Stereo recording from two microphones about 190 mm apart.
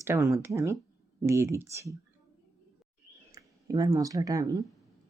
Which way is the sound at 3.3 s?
20° right (ahead or behind).